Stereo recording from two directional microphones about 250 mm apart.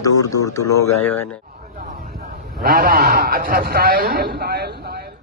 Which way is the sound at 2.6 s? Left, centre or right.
Right.